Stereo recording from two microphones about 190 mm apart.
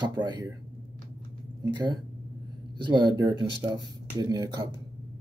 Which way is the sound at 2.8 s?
25° right (ahead or behind).